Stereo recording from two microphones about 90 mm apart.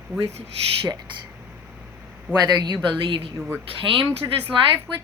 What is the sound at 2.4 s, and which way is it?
Speech, 50° right (ahead or behind).